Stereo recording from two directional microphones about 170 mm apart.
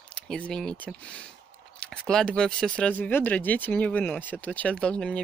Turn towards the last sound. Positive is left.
turn(degrees=5)  # may be behind; listen again after turning